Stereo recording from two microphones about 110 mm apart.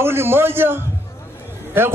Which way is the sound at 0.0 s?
20° right (ahead or behind).